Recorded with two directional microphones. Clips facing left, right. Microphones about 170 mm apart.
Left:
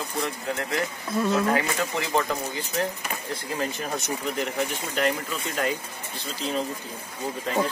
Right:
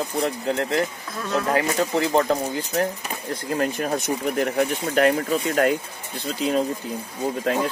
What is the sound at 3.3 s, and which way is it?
Speech, 50° right (ahead or behind).